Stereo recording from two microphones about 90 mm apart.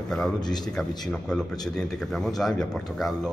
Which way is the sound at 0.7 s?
10° left (ahead or behind).